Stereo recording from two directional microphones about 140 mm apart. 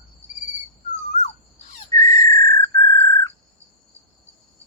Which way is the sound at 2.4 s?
25° left (ahead or behind).